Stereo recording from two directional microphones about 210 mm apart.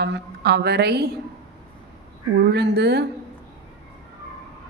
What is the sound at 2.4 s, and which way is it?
Speech, 50° right (ahead or behind).